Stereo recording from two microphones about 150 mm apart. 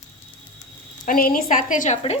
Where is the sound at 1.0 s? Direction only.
70° left (ahead or behind).